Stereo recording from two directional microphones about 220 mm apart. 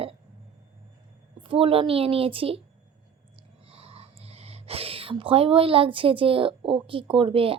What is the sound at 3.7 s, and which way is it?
Speech, 25° right (ahead or behind).